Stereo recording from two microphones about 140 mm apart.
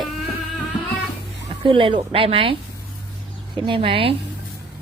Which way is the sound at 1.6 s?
35° right (ahead or behind).